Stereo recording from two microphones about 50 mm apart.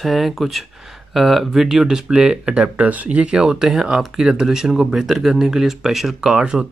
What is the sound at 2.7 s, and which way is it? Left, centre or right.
Speech, right.